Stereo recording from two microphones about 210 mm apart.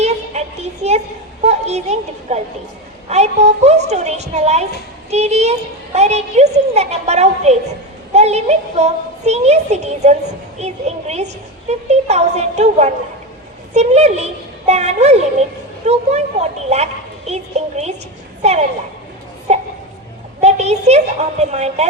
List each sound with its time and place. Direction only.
0.0 s child singing: 30° right (ahead or behind)
1.5 s a child's voice: 30° right (ahead or behind)
19.5 s a child's voice: 35° right (ahead or behind)